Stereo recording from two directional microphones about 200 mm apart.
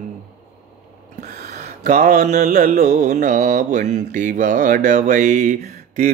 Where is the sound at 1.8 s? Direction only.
35° right (ahead or behind).